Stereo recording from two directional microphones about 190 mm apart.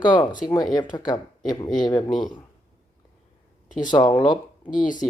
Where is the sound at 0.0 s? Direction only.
25° left (ahead or behind).